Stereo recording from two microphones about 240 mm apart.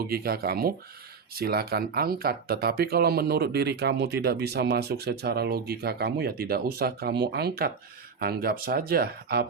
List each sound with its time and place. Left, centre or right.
0.1 s speech: right